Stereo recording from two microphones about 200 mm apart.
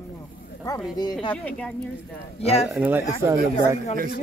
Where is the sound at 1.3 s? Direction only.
5° left (ahead or behind).